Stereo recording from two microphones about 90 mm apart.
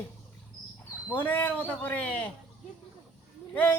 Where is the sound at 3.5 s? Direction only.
15° left (ahead or behind).